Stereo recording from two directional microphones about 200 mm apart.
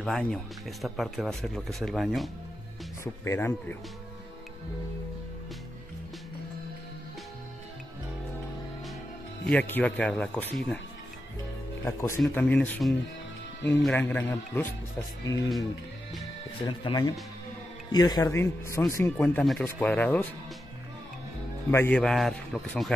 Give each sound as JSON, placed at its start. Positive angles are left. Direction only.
{"t": 0.0, "sound": "speech", "side_deg": 5}
{"t": 3.0, "sound": "speech", "side_deg": 15}
{"t": 9.5, "sound": "speech", "side_deg": 10}
{"t": 11.8, "sound": "speech", "side_deg": 15}
{"t": 16.5, "sound": "speech", "side_deg": 25}
{"t": 21.6, "sound": "speech", "side_deg": 10}